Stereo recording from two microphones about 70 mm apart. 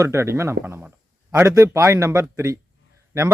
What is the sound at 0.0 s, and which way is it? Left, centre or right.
Speech, right.